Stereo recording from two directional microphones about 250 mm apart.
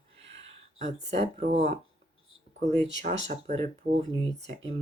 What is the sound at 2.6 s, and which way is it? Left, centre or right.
Speech, right.